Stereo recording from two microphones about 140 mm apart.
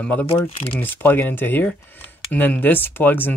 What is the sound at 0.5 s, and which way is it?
Speech, 40° left (ahead or behind).